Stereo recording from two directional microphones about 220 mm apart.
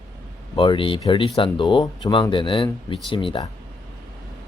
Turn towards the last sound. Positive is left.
turn(degrees=20)  # may be behind; listen again after turning